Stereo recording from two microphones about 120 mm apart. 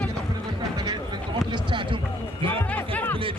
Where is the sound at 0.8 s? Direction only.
40° right (ahead or behind).